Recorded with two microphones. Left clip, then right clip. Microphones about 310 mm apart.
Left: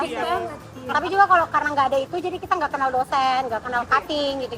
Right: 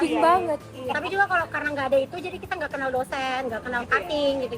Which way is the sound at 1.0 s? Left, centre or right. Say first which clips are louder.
Left 7 dB; left.